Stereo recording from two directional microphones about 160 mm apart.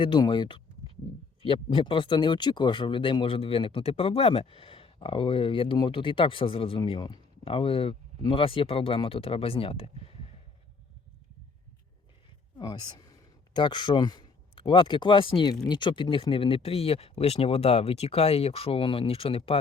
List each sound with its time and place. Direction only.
0.0 s speech: 30° left (ahead or behind)
12.5 s speech: 25° left (ahead or behind)